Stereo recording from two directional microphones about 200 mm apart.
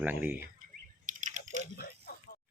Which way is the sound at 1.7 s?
50° left (ahead or behind).